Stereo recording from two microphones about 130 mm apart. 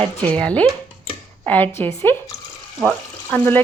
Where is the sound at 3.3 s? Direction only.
15° left (ahead or behind).